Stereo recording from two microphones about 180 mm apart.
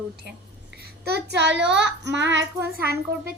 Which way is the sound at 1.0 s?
65° right (ahead or behind).